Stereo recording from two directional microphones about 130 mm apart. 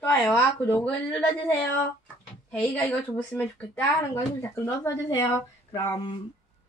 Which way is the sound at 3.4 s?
15° left (ahead or behind).